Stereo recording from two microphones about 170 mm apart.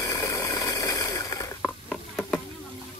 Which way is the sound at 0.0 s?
20° left (ahead or behind).